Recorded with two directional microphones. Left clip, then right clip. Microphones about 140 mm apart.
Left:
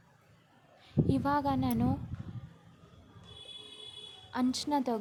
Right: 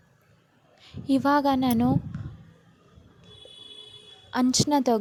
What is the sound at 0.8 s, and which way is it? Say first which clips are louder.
A woman's voice: right 7 dB; 50° right (ahead or behind).